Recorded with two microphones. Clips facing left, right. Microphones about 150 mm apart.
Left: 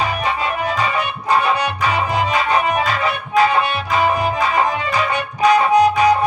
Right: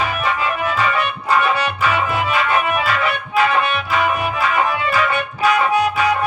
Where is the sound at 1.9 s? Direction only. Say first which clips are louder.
Left 2 dB; 35° left (ahead or behind).